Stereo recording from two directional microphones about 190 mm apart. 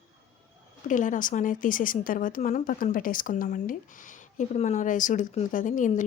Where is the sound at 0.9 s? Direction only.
40° left (ahead or behind).